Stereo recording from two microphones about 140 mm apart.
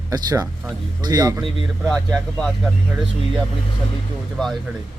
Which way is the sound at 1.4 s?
Centre (ahead or behind).